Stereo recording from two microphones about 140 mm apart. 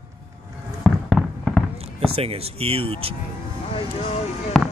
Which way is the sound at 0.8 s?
Centre (ahead or behind).